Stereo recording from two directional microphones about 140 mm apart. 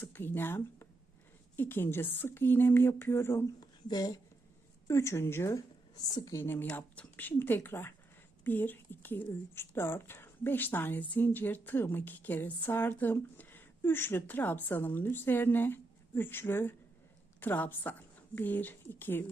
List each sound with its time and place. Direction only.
0.0 s a woman's voice: 15° left (ahead or behind)